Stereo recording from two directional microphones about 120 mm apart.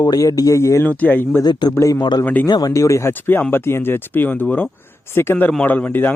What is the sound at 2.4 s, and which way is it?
Speech, 35° left (ahead or behind).